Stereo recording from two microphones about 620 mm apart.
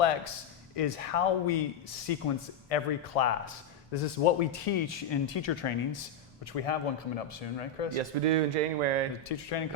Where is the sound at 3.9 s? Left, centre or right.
Left.